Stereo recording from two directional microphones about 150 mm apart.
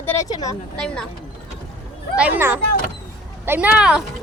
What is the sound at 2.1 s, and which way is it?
Speech, 10° right (ahead or behind).